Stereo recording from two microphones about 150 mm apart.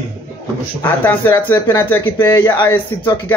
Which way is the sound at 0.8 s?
15° left (ahead or behind).